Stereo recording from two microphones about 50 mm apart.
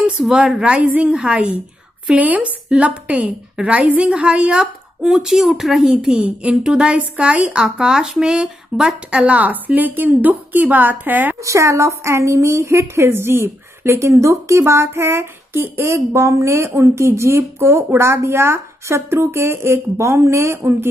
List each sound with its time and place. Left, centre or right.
0.2 s a woman's voice: centre
0.7 s speech: right
2.0 s speech: right; by 5.8 s centre
5.8 s speech: centre
6.2 s speech: right
11.4 s a woman's voice: right
13.8 s speech: right
20.5 s speech: right